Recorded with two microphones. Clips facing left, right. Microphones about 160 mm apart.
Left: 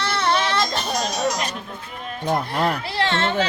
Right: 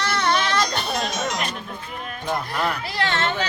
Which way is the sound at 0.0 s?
30° left (ahead or behind).